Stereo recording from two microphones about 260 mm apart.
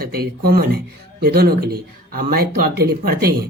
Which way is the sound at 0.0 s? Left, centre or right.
Right.